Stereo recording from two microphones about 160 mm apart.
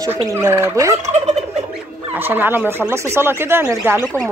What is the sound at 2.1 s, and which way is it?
Turkey, 10° right (ahead or behind).